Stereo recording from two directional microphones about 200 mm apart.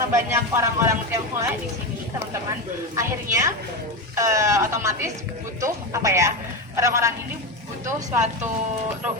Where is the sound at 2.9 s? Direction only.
15° right (ahead or behind).